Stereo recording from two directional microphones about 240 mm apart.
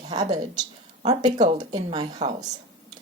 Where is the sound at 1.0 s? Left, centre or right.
Right.